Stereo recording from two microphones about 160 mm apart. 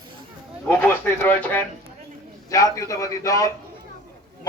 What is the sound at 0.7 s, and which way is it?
Speech, 10° left (ahead or behind).